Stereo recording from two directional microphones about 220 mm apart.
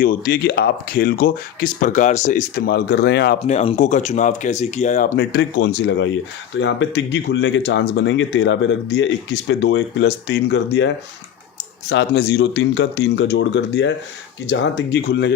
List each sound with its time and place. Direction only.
0.0 s speech: 40° left (ahead or behind)
2.6 s speech: 50° left (ahead or behind)
3.4 s speech: 30° left (ahead or behind); by 15.3 s 50° left (ahead or behind)